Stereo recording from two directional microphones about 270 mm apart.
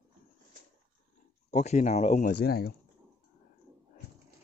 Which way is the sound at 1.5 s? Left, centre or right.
Left.